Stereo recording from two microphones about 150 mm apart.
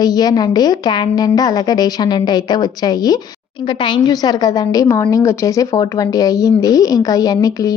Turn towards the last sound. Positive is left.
turn(degrees=25)  # may be behind; listen again after turning